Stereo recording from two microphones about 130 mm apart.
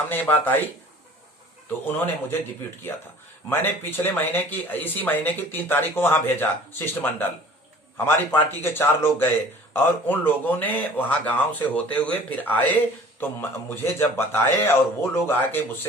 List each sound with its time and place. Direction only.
0.1 s speech: 15° left (ahead or behind)
1.9 s speech: 15° left (ahead or behind)